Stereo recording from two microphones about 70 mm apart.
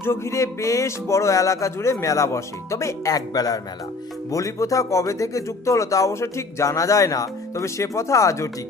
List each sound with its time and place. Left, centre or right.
0.0 s speech: left
4.3 s speech: left